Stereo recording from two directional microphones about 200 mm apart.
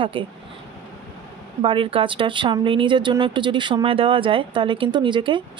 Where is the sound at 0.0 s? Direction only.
25° right (ahead or behind).